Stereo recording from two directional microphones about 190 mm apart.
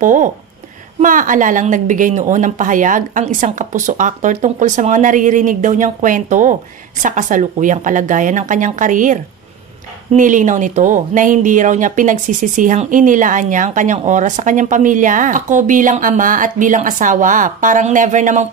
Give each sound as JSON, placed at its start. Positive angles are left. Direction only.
{"t": 0.0, "sound": "speech", "side_deg": -45}